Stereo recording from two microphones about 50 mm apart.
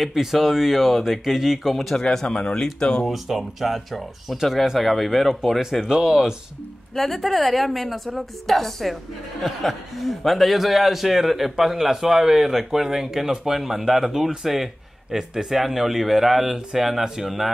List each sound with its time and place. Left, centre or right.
0.0 s a man's voice: centre
2.0 s speech: centre
3.1 s a man's voice: centre
7.0 s a man's voice: centre